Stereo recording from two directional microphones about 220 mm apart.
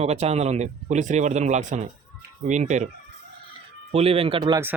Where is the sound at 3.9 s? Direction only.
30° right (ahead or behind).